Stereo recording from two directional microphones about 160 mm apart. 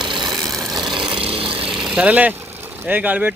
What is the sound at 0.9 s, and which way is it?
Vehicle, 30° right (ahead or behind).